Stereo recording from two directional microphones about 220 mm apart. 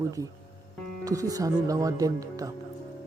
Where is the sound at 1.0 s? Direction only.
15° right (ahead or behind).